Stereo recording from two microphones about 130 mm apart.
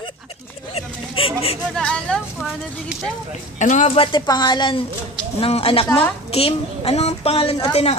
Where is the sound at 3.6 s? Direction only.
70° left (ahead or behind).